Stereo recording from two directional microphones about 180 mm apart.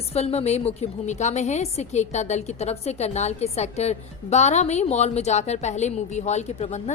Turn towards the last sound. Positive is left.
turn(degrees=35)  # may be behind; listen again after turning